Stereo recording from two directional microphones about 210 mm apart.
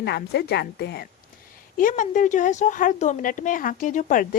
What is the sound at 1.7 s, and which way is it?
A woman's voice, 40° left (ahead or behind).